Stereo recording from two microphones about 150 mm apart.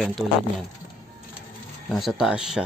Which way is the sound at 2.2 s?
5° right (ahead or behind).